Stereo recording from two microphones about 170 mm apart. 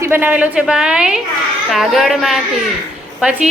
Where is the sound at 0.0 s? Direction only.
10° right (ahead or behind).